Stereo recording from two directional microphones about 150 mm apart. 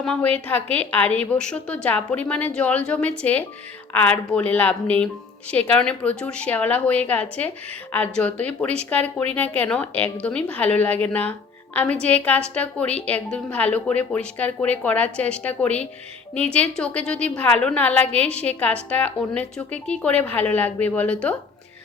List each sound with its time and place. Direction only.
0.0 s a woman's voice: 10° left (ahead or behind)